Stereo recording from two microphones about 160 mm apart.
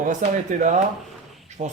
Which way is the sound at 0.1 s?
50° right (ahead or behind).